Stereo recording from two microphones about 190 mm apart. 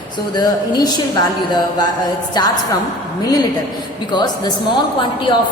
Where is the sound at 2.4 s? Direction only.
20° left (ahead or behind).